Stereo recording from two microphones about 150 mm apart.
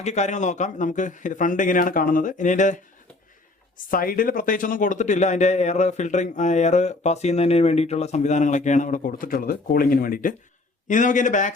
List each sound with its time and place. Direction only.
0.0 s a man's voice: 50° left (ahead or behind)
3.9 s a man's voice: 70° left (ahead or behind)
10.8 s a man's voice: 55° left (ahead or behind)